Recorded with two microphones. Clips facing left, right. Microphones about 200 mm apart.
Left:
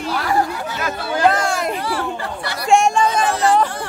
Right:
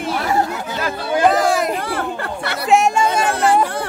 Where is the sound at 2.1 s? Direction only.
60° right (ahead or behind).